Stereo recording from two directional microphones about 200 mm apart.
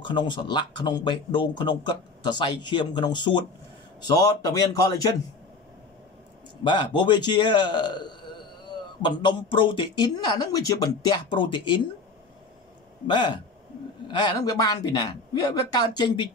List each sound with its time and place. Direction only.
0.0 s a man's voice: 25° left (ahead or behind)
6.6 s speech: 25° left (ahead or behind)
13.0 s speech: 25° left (ahead or behind)